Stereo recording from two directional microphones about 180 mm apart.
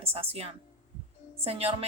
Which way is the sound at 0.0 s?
35° right (ahead or behind).